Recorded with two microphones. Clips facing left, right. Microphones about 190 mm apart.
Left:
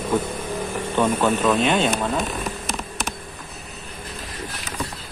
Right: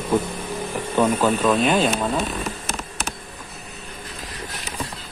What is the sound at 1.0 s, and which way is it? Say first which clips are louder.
Speech: right 1 dB; 5° right (ahead or behind).